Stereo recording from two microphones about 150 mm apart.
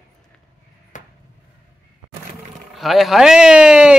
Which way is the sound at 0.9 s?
55° left (ahead or behind).